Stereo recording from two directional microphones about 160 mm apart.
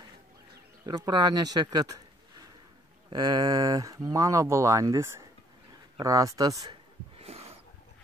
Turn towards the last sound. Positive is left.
turn(degrees=-40)  # may be behind; listen again after turning